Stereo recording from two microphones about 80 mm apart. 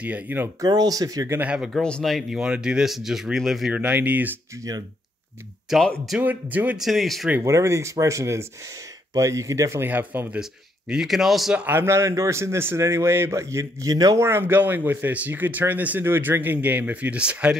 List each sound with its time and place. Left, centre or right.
0.0 s speech: right
0.6 s speech: right
1.4 s speech: centre
1.7 s speech: centre
2.0 s speech: centre
3.7 s speech: centre
6.1 s speech: centre
6.8 s speech: centre
7.4 s a man's voice: right
9.8 s speech: right
10.4 s speech: centre
11.5 s speech: right
11.8 s a man's voice: right
14.1 s speech: right